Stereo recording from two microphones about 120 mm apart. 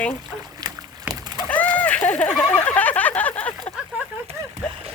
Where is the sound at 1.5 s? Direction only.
10° left (ahead or behind).